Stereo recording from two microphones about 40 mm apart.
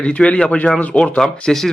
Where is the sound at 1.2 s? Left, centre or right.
Centre.